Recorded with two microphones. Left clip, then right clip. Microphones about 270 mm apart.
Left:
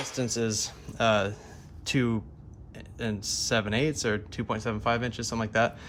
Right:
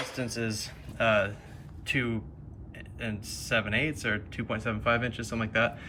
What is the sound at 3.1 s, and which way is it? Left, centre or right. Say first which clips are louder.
Speech: left 3 dB; centre.